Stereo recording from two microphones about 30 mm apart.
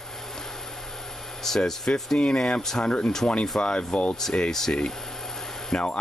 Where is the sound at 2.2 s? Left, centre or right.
Left.